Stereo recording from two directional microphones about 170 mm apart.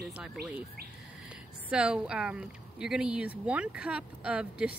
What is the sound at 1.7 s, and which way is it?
Speech, 5° right (ahead or behind).